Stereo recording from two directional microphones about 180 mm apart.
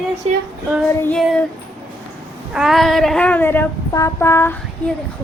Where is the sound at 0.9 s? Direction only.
10° left (ahead or behind).